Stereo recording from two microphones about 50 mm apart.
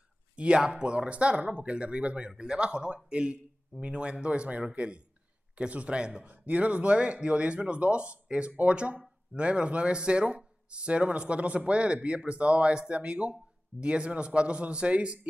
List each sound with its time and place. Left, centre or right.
0.4 s speech: right
6.3 s speech: right